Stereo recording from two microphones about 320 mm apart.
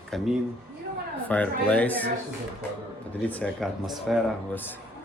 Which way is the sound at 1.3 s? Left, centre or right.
Centre.